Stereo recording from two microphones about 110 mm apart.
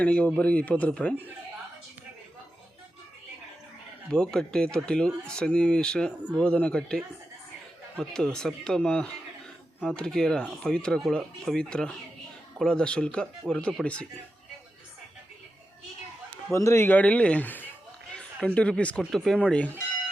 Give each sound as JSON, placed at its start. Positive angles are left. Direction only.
{"t": 0.0, "sound": "speech", "side_deg": 10}
{"t": 4.1, "sound": "speech", "side_deg": 5}
{"t": 16.5, "sound": "a man's voice", "side_deg": 25}
{"t": 16.9, "sound": "speech", "side_deg": 10}